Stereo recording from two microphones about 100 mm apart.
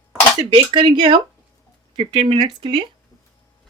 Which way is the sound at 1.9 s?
65° right (ahead or behind).